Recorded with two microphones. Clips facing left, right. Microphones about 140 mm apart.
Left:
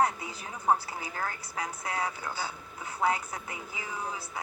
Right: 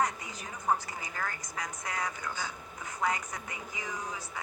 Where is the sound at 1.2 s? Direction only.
35° left (ahead or behind).